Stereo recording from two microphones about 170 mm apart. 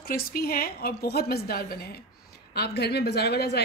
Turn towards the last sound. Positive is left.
turn(degrees=75)  # may be behind; listen again after turning